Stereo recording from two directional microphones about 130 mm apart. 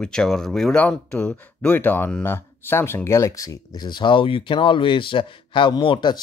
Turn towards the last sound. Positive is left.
turn(degrees=40)  # may be behind; listen again after turning